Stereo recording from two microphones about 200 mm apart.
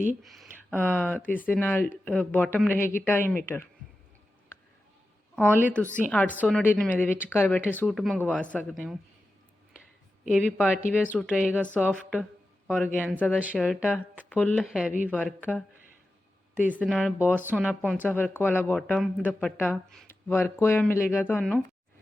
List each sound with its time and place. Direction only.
0.2 s speech: 5° right (ahead or behind)
0.9 s speech: 10° left (ahead or behind)
5.7 s speech: 5° left (ahead or behind)
10.2 s speech: centre (ahead or behind)
16.7 s speech: centre (ahead or behind)
18.0 s speech: 10° left (ahead or behind)